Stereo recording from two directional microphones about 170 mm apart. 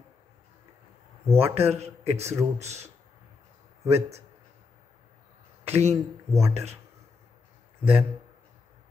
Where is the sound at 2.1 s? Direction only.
15° right (ahead or behind).